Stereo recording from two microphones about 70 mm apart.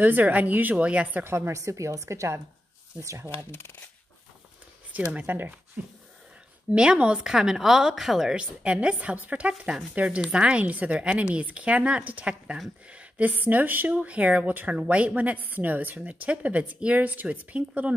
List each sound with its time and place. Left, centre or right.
0.0 s speech: right
1.2 s a woman's voice: right
1.5 s a woman's voice: right
5.1 s speech: right
6.7 s a woman's voice: centre
8.4 s speech: centre